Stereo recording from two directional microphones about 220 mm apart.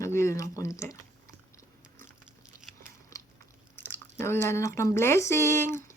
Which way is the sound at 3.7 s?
10° left (ahead or behind).